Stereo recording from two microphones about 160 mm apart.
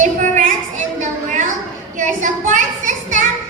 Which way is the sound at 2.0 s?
50° right (ahead or behind).